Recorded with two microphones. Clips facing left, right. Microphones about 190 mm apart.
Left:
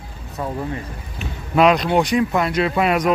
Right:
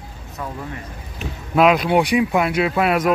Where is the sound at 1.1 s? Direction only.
Centre (ahead or behind).